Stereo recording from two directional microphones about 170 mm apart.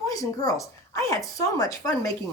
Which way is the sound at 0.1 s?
20° left (ahead or behind).